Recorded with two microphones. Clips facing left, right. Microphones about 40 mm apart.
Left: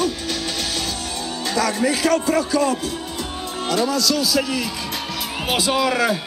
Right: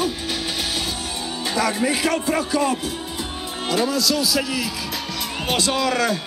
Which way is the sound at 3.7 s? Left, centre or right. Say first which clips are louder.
Left 1 dB; centre.